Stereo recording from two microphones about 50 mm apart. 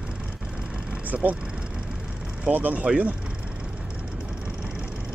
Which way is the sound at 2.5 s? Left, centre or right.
Right.